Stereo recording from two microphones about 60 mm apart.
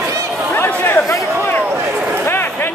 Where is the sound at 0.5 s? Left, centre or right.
Left.